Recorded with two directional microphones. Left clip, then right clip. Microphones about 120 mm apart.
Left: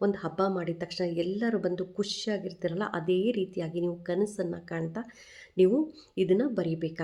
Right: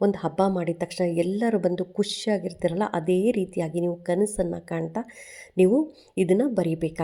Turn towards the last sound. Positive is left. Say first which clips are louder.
# right 5 dB
turn(degrees=-45)  # may be behind; listen again after turning